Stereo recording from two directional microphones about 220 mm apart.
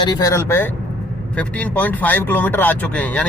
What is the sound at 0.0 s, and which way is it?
Speech, 15° left (ahead or behind).